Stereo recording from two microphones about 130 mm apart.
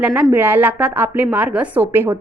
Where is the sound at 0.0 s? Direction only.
10° right (ahead or behind).